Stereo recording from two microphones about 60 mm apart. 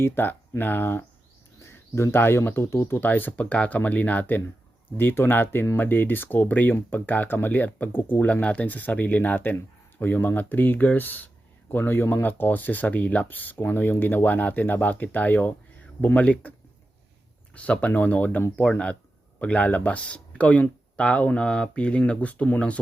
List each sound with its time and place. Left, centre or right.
0.0 s speech: left
1.6 s speech: left
3.0 s speech: left
8.3 s speech: left